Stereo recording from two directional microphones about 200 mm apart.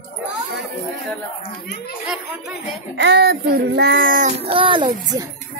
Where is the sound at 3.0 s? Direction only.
55° right (ahead or behind).